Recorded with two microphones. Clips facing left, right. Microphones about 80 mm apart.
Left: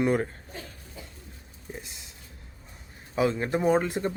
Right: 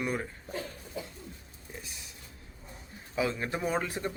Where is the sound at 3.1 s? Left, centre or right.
Left.